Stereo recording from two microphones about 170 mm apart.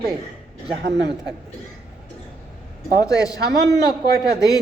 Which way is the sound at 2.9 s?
20° left (ahead or behind).